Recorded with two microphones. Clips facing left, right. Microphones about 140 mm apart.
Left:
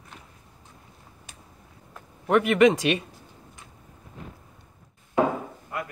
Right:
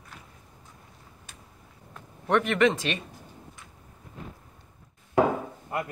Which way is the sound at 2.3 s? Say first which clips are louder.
Left 4 dB; 10° left (ahead or behind).